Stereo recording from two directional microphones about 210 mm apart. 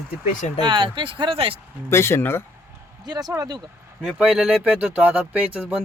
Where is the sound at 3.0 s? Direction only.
20° right (ahead or behind).